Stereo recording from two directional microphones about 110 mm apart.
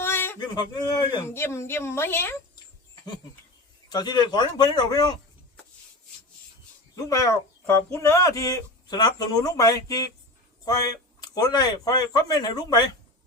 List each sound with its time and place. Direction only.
0.0 s a sound: 20° left (ahead or behind)
0.3 s speech: 40° left (ahead or behind)
1.2 s a woman's voice: 25° left (ahead or behind)
3.8 s a man's voice: 40° left (ahead or behind)
6.9 s a woman's voice: 30° left (ahead or behind)